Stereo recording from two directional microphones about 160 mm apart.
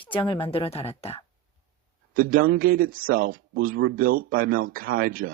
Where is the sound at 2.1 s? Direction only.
60° right (ahead or behind).